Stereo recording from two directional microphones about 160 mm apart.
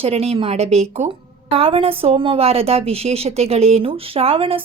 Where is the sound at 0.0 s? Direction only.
40° right (ahead or behind).